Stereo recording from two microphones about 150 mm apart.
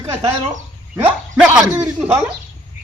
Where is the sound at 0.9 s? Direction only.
10° right (ahead or behind).